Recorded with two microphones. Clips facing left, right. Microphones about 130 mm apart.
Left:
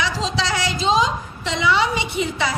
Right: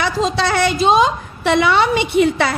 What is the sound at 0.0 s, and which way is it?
A woman's voice, 55° right (ahead or behind).